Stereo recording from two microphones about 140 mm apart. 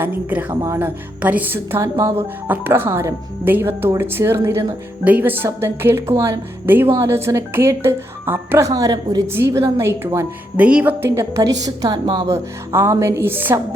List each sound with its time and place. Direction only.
0.0 s speech: 10° right (ahead or behind)